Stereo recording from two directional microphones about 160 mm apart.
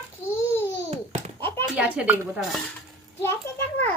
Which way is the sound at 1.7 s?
5° right (ahead or behind).